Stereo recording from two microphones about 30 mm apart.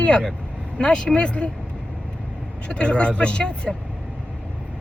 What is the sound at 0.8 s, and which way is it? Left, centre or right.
Speech, left.